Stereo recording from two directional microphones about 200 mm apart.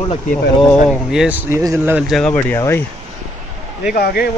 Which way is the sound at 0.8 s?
5° right (ahead or behind).